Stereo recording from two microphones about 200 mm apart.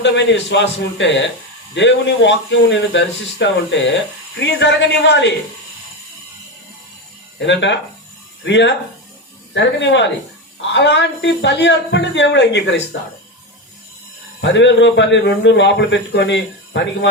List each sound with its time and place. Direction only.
0.0 s a man's voice: 65° left (ahead or behind)
7.3 s a man's voice: 65° left (ahead or behind)
14.4 s a man's voice: 65° left (ahead or behind)